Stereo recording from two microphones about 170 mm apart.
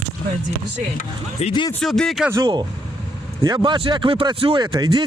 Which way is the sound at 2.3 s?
25° right (ahead or behind).